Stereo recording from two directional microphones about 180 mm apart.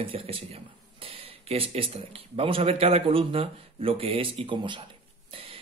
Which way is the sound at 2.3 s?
30° right (ahead or behind).